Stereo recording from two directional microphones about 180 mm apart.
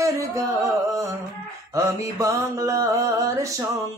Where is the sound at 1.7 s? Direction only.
20° right (ahead or behind).